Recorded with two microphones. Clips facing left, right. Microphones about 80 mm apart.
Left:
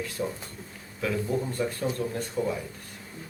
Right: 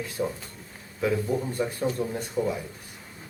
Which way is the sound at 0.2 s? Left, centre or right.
Centre.